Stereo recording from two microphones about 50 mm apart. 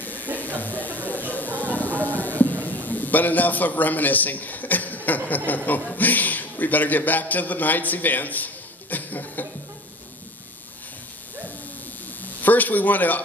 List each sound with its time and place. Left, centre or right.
0.0 s a sound: left
5.9 s a man's voice: left
8.9 s cough: left
12.2 s speech: left